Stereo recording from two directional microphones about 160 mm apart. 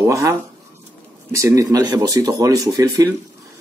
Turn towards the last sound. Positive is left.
turn(degrees=-20)  # may be behind; listen again after turning